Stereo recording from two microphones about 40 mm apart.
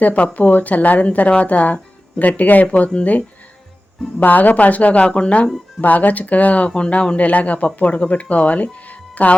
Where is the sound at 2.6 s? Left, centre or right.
Left.